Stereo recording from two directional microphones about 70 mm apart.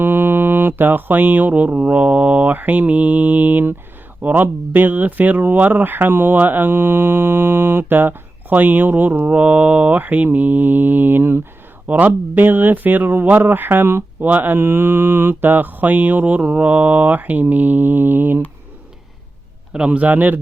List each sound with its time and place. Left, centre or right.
0.0 s speech: right
11.9 s speech: right
19.7 s speech: centre